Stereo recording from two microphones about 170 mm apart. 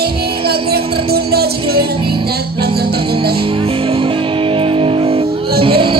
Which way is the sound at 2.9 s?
30° right (ahead or behind).